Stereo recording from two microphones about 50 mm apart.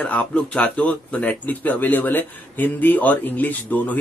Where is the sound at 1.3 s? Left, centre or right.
Left.